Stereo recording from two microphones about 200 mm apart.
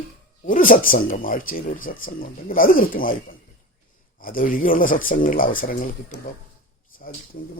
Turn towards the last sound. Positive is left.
turn(degrees=45)  # may be behind; listen again after turning